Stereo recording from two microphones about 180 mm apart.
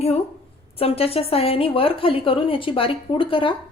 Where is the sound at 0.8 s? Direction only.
35° left (ahead or behind).